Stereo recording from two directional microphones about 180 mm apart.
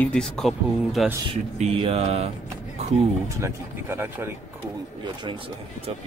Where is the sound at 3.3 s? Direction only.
15° right (ahead or behind).